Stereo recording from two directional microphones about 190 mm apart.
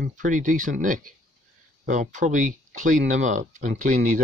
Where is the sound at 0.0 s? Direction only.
45° right (ahead or behind).